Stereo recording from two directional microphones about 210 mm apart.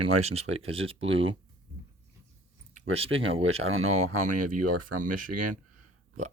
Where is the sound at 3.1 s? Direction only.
70° right (ahead or behind); by 4.5 s 90° right.